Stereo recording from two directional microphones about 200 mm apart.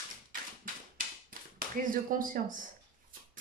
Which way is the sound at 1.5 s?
45° right (ahead or behind).